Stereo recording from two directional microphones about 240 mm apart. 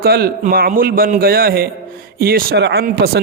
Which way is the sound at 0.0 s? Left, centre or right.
Right.